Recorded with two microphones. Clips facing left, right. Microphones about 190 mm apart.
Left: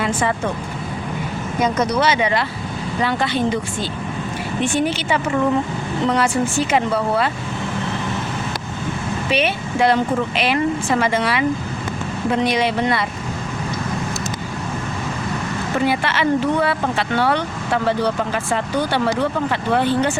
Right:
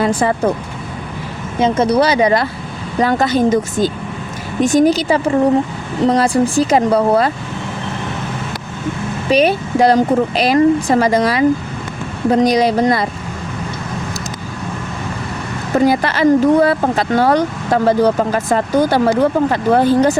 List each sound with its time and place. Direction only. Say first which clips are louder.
0.0 s speech: right 6 dB; 35° right (ahead or behind)
1.5 s speech: right 6 dB; 25° right (ahead or behind)
9.3 s speech: right 8 dB; 40° right (ahead or behind)
15.7 s speech: right 7 dB; 40° right (ahead or behind)